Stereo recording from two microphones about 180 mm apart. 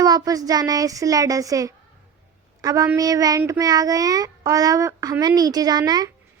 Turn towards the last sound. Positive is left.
turn(degrees=-20)  # may be behind; listen again after turning